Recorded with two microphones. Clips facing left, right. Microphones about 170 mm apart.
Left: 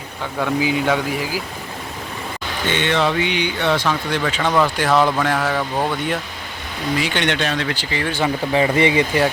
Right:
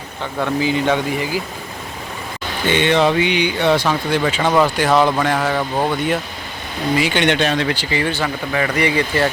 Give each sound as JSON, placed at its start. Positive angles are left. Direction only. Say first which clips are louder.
{"t": 0.6, "sound": "speech", "louder": "right 2 dB", "side_deg": 5}
{"t": 2.6, "sound": "speech", "louder": "right 4 dB", "side_deg": -15}
{"t": 7.0, "sound": "speech", "louder": "right 5 dB", "side_deg": -5}
{"t": 7.3, "sound": "speech", "louder": "right 4 dB", "side_deg": -20}
{"t": 8.1, "sound": "speech", "louder": "left 3 dB", "side_deg": 20}